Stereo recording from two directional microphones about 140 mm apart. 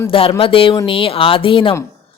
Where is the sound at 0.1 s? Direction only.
40° left (ahead or behind).